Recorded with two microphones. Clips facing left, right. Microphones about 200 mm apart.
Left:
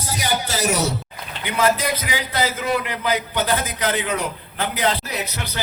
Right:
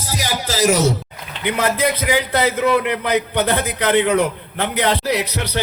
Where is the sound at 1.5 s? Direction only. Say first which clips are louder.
Right 2 dB; 55° right (ahead or behind).